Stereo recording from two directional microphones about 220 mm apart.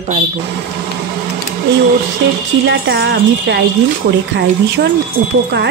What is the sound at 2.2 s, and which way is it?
Speech, 50° right (ahead or behind).